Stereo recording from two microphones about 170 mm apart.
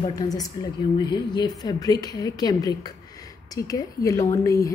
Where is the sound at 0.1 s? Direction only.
20° left (ahead or behind).